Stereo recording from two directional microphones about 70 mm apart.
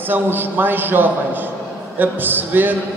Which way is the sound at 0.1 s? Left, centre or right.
Right.